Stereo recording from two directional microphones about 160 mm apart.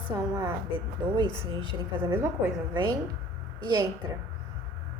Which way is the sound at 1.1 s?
30° right (ahead or behind).